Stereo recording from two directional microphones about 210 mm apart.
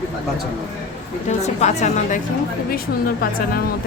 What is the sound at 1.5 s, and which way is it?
Speech, 35° left (ahead or behind).